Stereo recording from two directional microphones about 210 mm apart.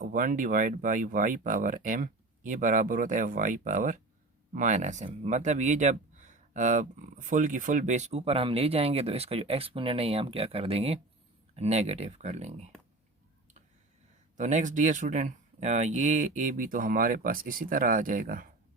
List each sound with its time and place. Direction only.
0.0 s speech: 40° right (ahead or behind)
14.3 s speech: 35° right (ahead or behind)